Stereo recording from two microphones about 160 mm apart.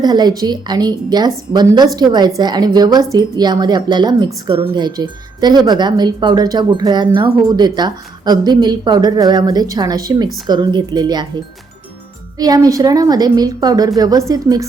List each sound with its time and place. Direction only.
0.0 s speech: 25° right (ahead or behind)
12.4 s speech: 25° right (ahead or behind)